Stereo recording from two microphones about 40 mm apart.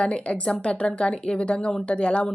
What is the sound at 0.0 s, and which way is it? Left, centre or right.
Speech, left.